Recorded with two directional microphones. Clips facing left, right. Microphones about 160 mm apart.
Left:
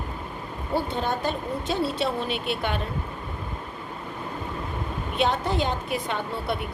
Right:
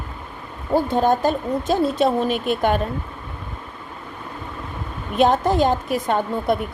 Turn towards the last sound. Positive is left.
turn(degrees=-45)  # may be behind; listen again after turning